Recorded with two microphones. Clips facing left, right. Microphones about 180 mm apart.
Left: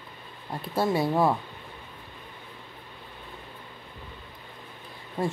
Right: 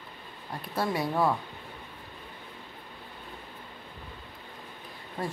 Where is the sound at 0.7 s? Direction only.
25° left (ahead or behind).